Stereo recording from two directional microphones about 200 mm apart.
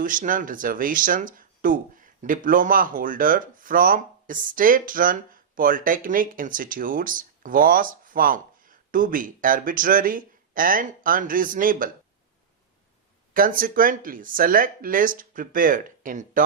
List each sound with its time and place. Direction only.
0.0 s speech: 40° right (ahead or behind)
13.3 s speech: 45° right (ahead or behind)